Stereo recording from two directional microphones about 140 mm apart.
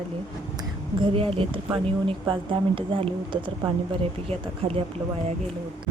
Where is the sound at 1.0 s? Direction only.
40° right (ahead or behind).